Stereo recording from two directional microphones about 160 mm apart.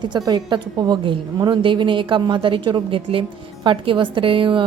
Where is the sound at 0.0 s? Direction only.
25° right (ahead or behind).